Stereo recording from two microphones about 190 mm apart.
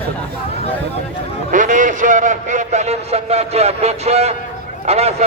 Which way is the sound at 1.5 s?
40° right (ahead or behind).